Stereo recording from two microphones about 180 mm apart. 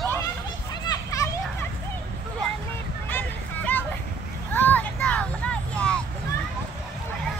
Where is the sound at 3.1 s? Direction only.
10° left (ahead or behind).